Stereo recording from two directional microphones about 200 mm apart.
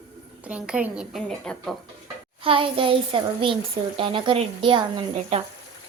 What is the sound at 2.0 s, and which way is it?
A child's voice, 25° right (ahead or behind).